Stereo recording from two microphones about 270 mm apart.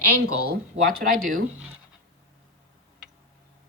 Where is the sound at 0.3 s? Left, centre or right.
Right.